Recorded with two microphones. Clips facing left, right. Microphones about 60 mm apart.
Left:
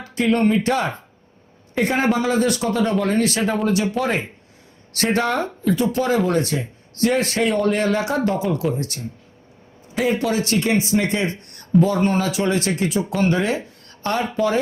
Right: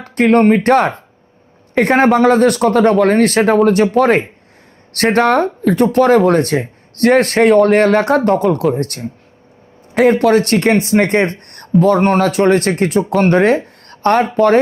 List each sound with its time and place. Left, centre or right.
0.0 s speech: right